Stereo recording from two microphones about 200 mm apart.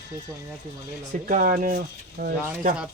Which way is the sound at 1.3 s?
45° right (ahead or behind).